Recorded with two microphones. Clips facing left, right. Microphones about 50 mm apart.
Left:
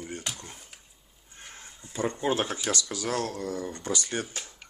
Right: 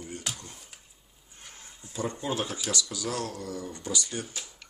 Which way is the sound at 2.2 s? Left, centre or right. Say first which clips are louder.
Left 4 dB; left.